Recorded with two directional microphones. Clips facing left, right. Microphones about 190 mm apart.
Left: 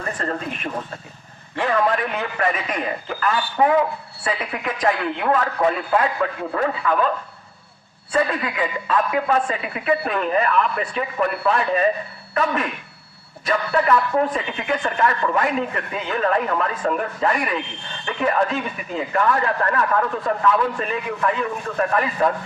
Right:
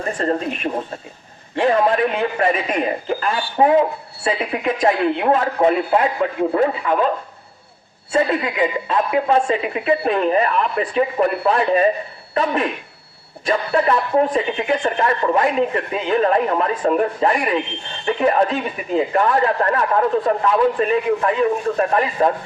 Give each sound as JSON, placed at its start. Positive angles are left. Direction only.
{"t": 0.2, "sound": "a man's voice", "side_deg": -30}
{"t": 8.1, "sound": "a man's voice", "side_deg": -25}